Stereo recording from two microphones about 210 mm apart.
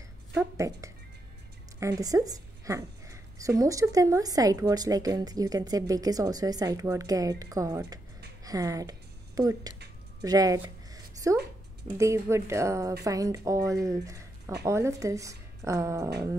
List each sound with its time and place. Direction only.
0.3 s a woman's voice: 15° right (ahead or behind)
10.2 s a sound: 15° right (ahead or behind)
12.0 s a woman's voice: 15° right (ahead or behind)